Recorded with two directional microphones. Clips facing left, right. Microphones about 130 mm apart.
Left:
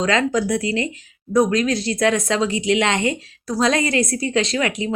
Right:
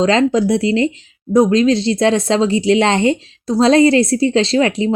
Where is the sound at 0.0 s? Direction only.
30° right (ahead or behind).